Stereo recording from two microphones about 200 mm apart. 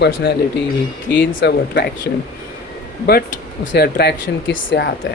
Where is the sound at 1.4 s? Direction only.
55° left (ahead or behind).